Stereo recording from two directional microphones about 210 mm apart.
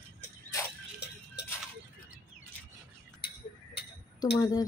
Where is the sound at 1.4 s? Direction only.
55° left (ahead or behind).